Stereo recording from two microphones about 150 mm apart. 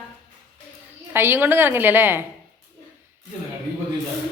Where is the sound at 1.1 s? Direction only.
15° right (ahead or behind).